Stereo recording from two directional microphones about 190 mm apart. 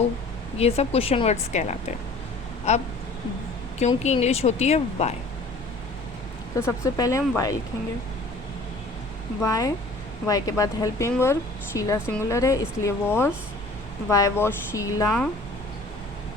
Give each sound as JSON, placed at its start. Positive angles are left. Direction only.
{"t": 0.6, "sound": "a woman's voice", "side_deg": 30}
{"t": 6.6, "sound": "speech", "side_deg": 15}
{"t": 9.4, "sound": "speech", "side_deg": 15}